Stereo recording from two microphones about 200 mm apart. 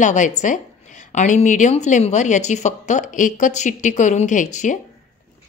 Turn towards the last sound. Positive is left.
turn(degrees=40)  # may be behind; listen again after turning